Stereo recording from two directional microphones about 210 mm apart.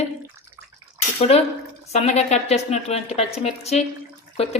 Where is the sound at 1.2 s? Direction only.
30° left (ahead or behind).